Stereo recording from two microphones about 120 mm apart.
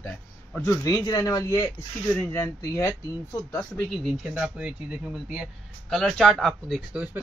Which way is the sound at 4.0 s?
5° right (ahead or behind).